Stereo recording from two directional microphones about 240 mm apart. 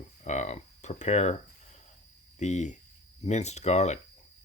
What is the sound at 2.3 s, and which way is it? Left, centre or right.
Speech, left.